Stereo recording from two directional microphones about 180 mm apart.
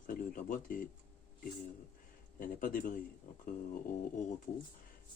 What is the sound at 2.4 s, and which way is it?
Speech, 50° left (ahead or behind).